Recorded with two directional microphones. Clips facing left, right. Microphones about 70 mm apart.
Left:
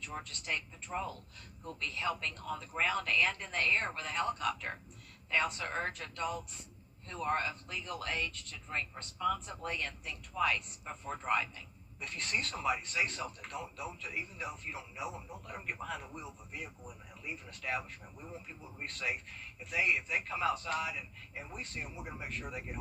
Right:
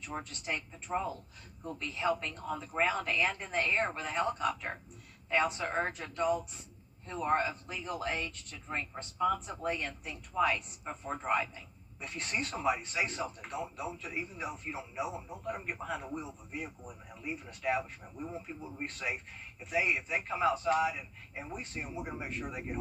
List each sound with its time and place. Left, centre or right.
0.1 s a man's voice: centre